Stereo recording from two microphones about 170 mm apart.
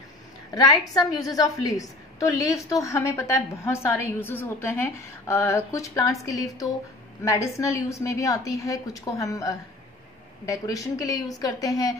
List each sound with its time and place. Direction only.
0.6 s a woman's voice: 20° left (ahead or behind)